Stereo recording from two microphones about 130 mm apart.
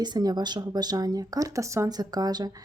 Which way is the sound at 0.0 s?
30° right (ahead or behind).